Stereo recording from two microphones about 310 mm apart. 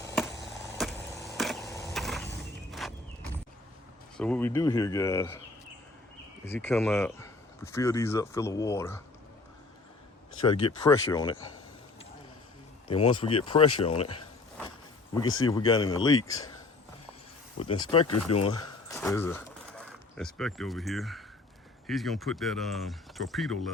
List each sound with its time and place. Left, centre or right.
0.4 s chop: centre
1.1 s a sound: centre
2.8 s walk: centre
4.2 s speech: centre
6.4 s speech: centre
10.4 s speech: centre
12.9 s speech: centre
15.2 s speech: left
15.4 s speech: centre
17.6 s speech: centre